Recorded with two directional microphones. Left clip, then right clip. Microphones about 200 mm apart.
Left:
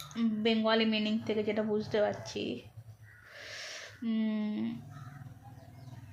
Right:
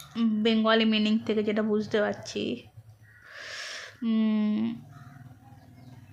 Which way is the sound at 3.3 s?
40° right (ahead or behind).